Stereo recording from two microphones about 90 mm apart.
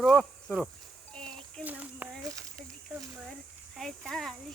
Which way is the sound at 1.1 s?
10° left (ahead or behind).